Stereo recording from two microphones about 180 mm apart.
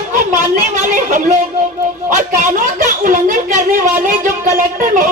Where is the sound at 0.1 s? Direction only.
45° right (ahead or behind).